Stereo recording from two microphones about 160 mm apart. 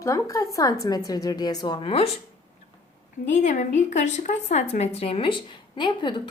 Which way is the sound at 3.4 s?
50° left (ahead or behind).